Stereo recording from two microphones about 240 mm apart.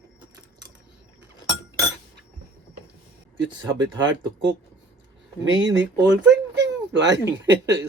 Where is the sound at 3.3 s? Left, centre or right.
Right.